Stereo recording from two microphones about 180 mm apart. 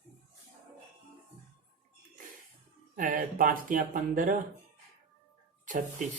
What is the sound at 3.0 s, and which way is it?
Speech, 50° right (ahead or behind).